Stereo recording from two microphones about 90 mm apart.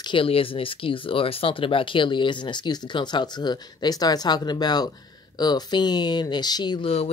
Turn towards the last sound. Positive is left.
turn(degrees=50)  # may be behind; listen again after turning